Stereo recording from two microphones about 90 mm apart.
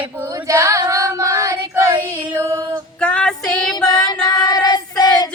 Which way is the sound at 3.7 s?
50° left (ahead or behind).